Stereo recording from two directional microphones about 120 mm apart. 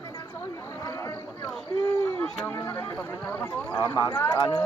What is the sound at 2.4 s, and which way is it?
Speech, 20° left (ahead or behind).